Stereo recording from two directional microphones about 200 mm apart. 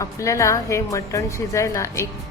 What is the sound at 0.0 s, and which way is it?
Speech, 15° left (ahead or behind).